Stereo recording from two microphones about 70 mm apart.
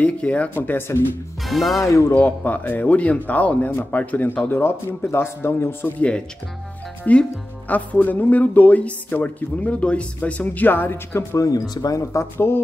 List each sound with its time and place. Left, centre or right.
0.0 s speech: centre; by 1.0 s left
1.5 s speech: centre
1.8 s speech: left
2.0 s speech: left
5.9 s speech: centre; by 11.2 s left
11.3 s speech: left